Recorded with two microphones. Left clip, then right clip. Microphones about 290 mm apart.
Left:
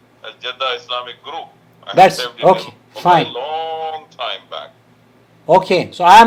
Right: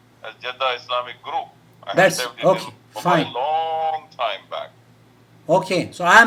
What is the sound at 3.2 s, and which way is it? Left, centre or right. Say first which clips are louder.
A man's voice: right 1 dB; left.